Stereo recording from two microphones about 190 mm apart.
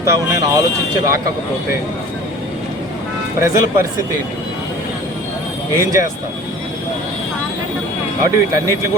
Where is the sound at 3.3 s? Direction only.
15° right (ahead or behind).